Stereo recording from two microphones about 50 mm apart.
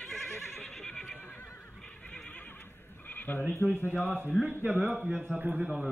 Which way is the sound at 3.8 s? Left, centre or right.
Left.